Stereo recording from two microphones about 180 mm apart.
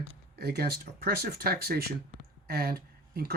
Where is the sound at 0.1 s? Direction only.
65° right (ahead or behind).